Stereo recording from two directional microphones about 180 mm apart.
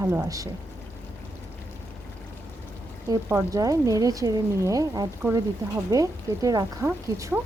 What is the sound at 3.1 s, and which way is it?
Speech, 15° right (ahead or behind).